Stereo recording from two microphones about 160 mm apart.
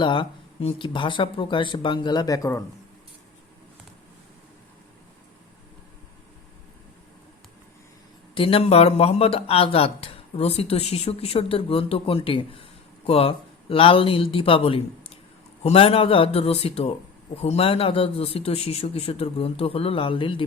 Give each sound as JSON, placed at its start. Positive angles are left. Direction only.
{"t": 0.0, "sound": "speech", "side_deg": 30}
{"t": 8.4, "sound": "speech", "side_deg": 35}